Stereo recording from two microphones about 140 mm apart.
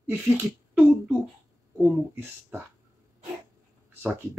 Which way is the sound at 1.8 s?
15° right (ahead or behind).